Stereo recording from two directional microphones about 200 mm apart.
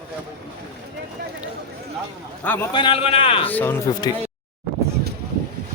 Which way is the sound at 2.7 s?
25° left (ahead or behind).